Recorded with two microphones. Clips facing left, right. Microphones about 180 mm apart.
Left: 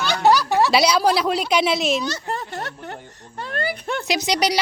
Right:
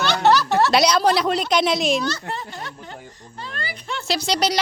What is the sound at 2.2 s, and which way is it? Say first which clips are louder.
Speech: left 2 dB; 45° left (ahead or behind).